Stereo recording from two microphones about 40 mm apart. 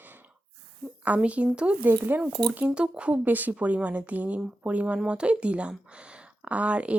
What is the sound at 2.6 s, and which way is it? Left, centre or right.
Speech, right.